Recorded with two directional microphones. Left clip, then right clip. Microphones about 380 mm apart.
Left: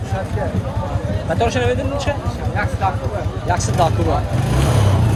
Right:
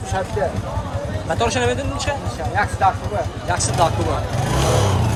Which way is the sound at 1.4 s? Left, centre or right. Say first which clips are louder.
Left 1 dB; centre.